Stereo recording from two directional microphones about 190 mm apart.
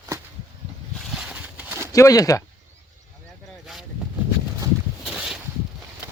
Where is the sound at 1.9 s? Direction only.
15° left (ahead or behind).